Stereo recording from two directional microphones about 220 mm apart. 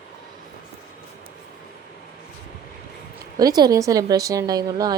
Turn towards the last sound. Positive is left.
turn(degrees=-15)  # may be behind; listen again after turning